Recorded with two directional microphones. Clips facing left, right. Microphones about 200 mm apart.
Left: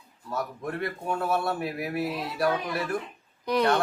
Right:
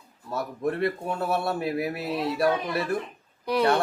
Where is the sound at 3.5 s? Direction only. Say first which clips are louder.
Right 1 dB; 5° right (ahead or behind).